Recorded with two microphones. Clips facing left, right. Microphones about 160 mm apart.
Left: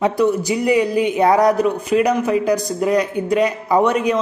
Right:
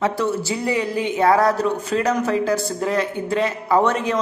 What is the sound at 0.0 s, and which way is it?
Speech, 15° left (ahead or behind).